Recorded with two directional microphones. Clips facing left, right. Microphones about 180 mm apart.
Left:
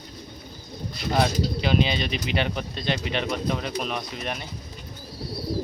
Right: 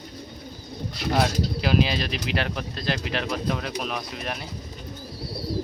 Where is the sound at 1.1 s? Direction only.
5° right (ahead or behind).